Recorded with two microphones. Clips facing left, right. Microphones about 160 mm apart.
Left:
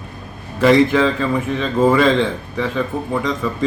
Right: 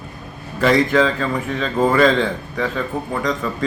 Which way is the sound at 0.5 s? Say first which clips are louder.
Left 3 dB; centre (ahead or behind).